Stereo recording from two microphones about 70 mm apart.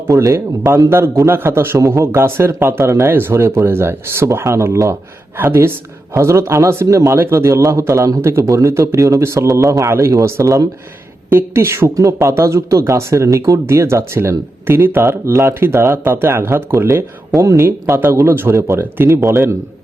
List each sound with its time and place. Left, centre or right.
0.2 s a man's voice: right
0.9 s a man's voice: right
6.1 s a man's voice: right
11.9 s a man's voice: right